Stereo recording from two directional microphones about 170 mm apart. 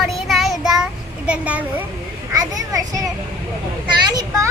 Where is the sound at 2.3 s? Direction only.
20° right (ahead or behind).